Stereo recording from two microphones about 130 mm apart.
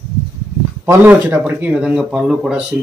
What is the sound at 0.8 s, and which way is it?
Speech, 15° right (ahead or behind).